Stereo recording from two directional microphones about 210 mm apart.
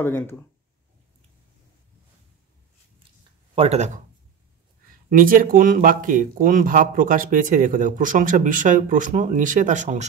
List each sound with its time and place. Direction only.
0.0 s speech: 10° left (ahead or behind)
3.5 s speech: 30° right (ahead or behind)
5.1 s speech: 40° right (ahead or behind)